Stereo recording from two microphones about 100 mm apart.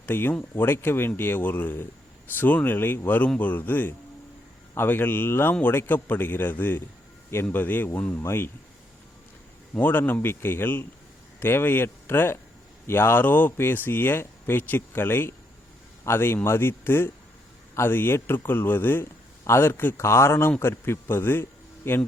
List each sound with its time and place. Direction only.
0.0 s a man's voice: 20° left (ahead or behind)
9.7 s speech: 20° left (ahead or behind)